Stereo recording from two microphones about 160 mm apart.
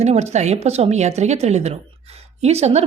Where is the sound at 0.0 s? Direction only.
45° right (ahead or behind).